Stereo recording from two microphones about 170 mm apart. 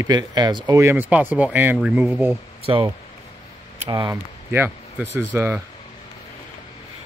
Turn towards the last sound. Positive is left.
turn(degrees=-15)  # may be behind; listen again after turning